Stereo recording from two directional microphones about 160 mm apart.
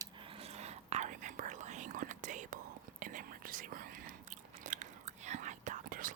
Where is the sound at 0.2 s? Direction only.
35° right (ahead or behind).